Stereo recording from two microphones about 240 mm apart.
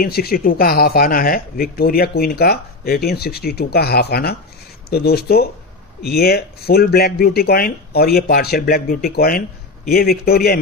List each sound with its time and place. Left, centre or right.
0.0 s speech: left